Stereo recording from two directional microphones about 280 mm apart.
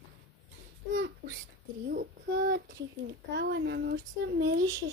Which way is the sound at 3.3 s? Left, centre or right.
Right.